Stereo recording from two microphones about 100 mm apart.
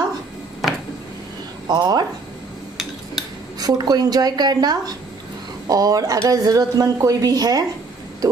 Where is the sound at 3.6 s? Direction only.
40° right (ahead or behind).